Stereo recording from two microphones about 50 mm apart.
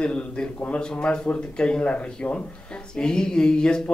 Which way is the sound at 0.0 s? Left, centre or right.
Centre.